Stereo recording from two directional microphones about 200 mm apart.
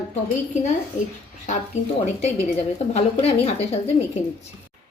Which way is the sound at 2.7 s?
30° left (ahead or behind).